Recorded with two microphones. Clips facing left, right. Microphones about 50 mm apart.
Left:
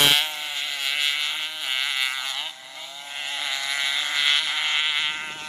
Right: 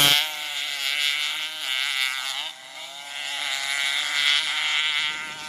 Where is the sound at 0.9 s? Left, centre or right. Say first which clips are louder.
Even; centre.